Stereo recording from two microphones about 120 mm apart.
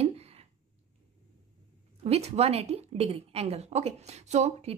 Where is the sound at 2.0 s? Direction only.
60° right (ahead or behind).